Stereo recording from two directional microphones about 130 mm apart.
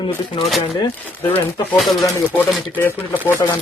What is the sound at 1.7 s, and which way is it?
Speech, centre (ahead or behind).